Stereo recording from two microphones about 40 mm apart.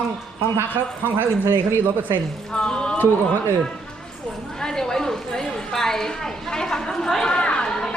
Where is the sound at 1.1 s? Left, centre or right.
Right.